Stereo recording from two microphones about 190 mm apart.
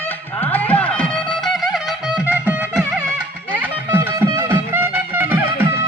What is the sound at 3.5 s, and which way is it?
Music, 10° right (ahead or behind).